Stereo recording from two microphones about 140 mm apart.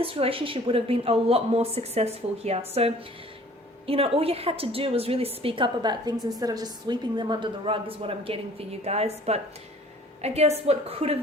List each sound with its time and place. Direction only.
0.0 s a woman's voice: 40° right (ahead or behind)